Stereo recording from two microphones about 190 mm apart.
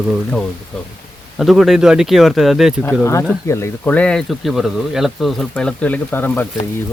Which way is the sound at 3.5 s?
15° left (ahead or behind).